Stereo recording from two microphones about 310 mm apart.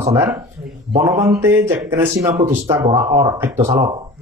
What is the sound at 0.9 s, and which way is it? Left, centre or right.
A man's voice, centre.